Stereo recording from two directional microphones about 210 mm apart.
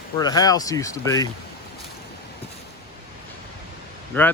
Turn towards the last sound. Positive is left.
turn(degrees=10)  # may be behind; listen again after turning